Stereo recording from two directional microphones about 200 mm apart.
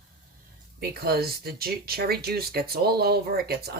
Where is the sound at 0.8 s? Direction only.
50° right (ahead or behind).